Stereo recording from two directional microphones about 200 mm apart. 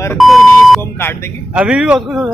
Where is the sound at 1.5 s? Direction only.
5° right (ahead or behind).